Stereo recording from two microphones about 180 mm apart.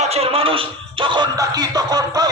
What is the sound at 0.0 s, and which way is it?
Speech, 35° right (ahead or behind).